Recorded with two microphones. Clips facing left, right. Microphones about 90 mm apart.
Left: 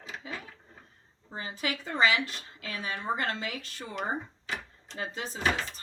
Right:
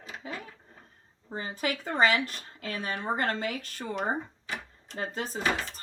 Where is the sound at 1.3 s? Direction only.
50° right (ahead or behind).